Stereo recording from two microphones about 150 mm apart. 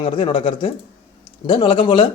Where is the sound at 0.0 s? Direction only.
35° left (ahead or behind).